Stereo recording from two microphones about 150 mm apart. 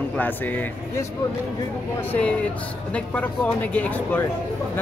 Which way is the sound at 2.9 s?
10° left (ahead or behind).